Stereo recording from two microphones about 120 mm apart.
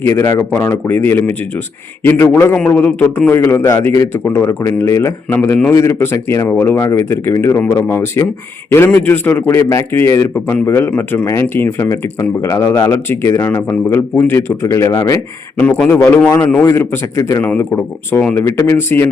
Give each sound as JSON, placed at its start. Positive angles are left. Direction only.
{"t": 0.0, "sound": "a man's voice", "side_deg": 20}
{"t": 5.7, "sound": "a man's voice", "side_deg": 25}
{"t": 15.5, "sound": "a man's voice", "side_deg": 10}
{"t": 17.4, "sound": "a man's voice", "side_deg": 15}
{"t": 18.3, "sound": "a man's voice", "side_deg": 20}